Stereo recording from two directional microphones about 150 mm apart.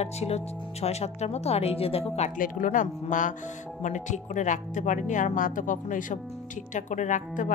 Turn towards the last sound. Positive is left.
turn(degrees=60)  # may be behind; listen again after turning